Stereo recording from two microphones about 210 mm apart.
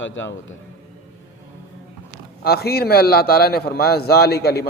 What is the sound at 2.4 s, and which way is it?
A man's voice, 50° left (ahead or behind).